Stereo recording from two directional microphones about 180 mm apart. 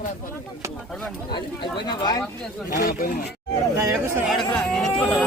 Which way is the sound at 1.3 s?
25° left (ahead or behind).